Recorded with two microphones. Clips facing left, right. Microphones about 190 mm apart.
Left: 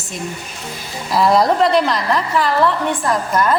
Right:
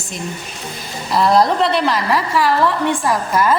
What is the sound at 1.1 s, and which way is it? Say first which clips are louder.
A woman's voice: even; centre (ahead or behind).